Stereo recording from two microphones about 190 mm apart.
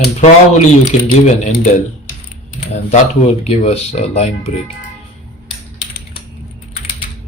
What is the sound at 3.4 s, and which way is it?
Speech, 35° left (ahead or behind).